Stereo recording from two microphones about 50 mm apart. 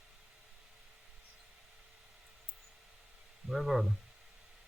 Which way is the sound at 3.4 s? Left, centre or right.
Centre.